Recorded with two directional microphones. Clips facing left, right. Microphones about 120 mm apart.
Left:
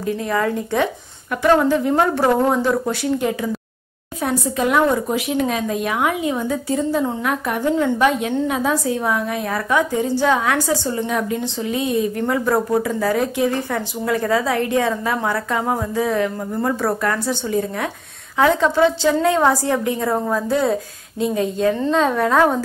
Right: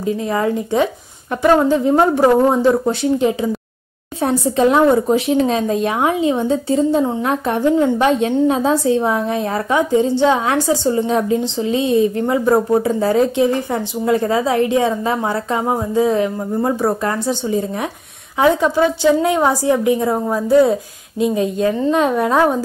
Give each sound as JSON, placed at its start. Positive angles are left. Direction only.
{"t": 0.0, "sound": "a woman's voice", "side_deg": -20}